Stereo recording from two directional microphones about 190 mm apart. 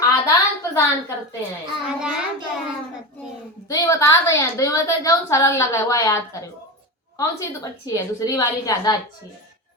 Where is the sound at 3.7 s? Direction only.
15° left (ahead or behind).